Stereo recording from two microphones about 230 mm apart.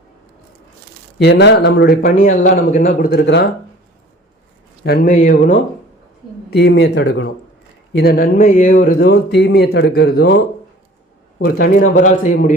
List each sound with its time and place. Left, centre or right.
1.2 s a man's voice: left
2.0 s speech: left
4.8 s speech: left
6.5 s a man's voice: left